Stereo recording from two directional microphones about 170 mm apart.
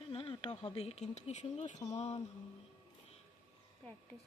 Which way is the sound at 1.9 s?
40° left (ahead or behind).